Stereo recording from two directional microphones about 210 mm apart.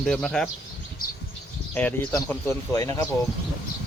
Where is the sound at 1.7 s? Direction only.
10° left (ahead or behind).